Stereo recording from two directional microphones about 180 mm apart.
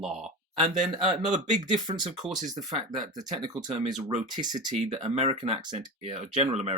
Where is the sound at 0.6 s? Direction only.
25° right (ahead or behind).